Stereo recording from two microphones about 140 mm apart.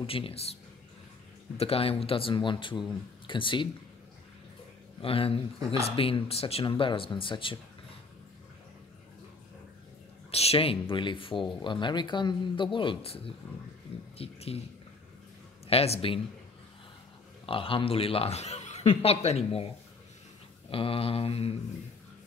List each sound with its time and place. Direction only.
0.0 s speech: 40° left (ahead or behind)
1.6 s speech: 45° left (ahead or behind)
5.0 s speech: 40° left (ahead or behind)
10.3 s speech: 45° left (ahead or behind)
15.7 s speech: 45° left (ahead or behind)
17.5 s speech: 40° left (ahead or behind)
20.7 s speech: 40° left (ahead or behind)